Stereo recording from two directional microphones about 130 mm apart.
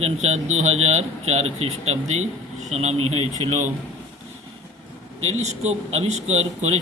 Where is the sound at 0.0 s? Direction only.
60° right (ahead or behind).